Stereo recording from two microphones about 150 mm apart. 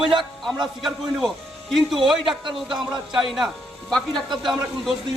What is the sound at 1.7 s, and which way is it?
A man's voice, centre (ahead or behind).